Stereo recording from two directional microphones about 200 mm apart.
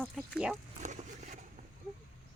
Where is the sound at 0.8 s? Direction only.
35° right (ahead or behind).